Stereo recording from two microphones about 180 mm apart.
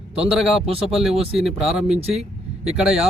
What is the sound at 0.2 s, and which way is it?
Speech, 5° right (ahead or behind).